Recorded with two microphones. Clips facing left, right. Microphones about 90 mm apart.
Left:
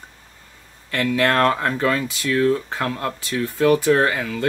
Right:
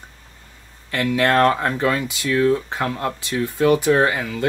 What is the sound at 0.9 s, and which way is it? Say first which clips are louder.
Speech: right 1 dB; 15° right (ahead or behind).